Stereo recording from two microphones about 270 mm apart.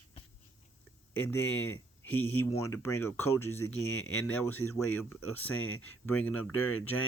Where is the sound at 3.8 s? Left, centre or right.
Left.